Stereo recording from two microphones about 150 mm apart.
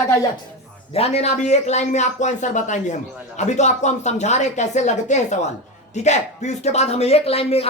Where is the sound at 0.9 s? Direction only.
40° left (ahead or behind).